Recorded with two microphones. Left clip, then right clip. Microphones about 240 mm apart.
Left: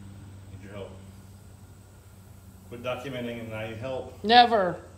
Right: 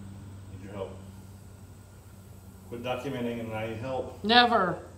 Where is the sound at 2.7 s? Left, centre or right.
Centre.